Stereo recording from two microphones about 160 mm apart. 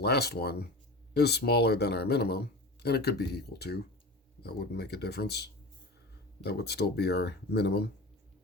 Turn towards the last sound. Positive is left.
turn(degrees=90)